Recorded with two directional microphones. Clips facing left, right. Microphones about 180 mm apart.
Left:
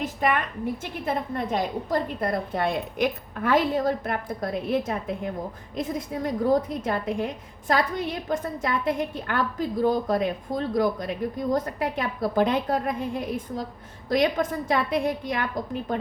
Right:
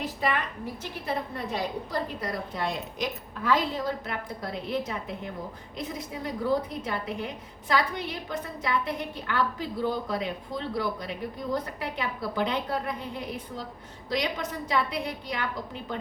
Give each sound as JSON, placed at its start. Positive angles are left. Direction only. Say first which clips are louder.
{"t": 1.0, "sound": "a woman's voice", "louder": "left 4 dB", "side_deg": 50}